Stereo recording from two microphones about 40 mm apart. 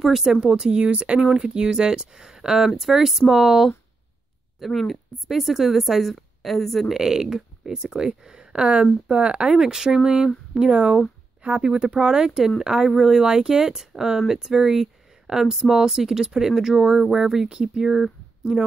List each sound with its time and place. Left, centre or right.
0.0 s a woman's voice: centre
0.4 s speech: centre
0.7 s speech: right
1.2 s a woman's voice: centre
4.6 s a woman's voice: centre
6.9 s speech: centre
9.5 s speech: centre